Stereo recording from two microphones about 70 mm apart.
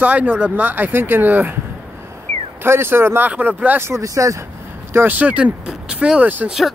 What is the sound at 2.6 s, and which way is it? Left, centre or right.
Speech, right.